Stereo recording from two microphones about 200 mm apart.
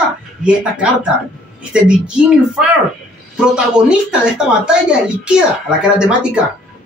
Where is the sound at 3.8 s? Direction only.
5° right (ahead or behind).